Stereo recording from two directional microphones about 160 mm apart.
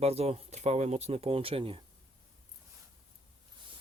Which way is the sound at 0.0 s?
40° right (ahead or behind).